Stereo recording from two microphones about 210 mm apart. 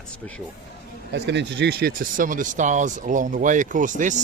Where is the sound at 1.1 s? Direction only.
55° right (ahead or behind).